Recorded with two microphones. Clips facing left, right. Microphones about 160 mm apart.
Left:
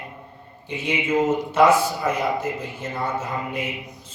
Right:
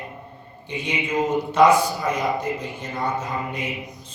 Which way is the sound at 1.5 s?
5° left (ahead or behind).